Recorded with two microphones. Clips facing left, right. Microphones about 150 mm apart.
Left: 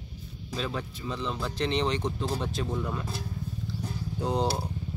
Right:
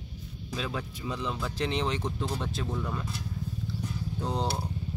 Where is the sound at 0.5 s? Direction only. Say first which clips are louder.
Left 1 dB; 5° right (ahead or behind).